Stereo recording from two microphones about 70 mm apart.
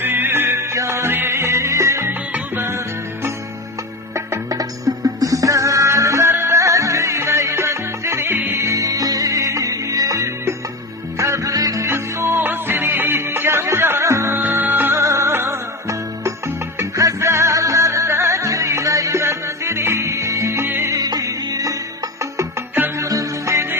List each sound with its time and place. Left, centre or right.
0.0 s music: right
2.0 s music: right
4.1 s music: right
8.5 s music: right
14.0 s music: right
14.3 s music: right
14.9 s music: right
16.8 s music: right
19.2 s music: right
20.8 s music: right
23.0 s music: right